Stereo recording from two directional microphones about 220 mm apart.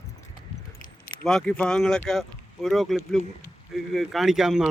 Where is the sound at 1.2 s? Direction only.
5° left (ahead or behind).